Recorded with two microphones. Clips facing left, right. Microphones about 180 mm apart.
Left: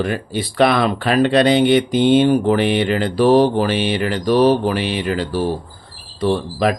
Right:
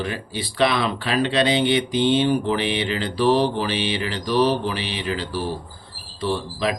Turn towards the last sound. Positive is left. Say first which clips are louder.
# left 6 dB
turn(degrees=50)  # may be behind; listen again after turning